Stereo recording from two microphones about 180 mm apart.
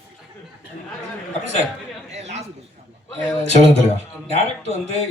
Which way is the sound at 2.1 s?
35° right (ahead or behind).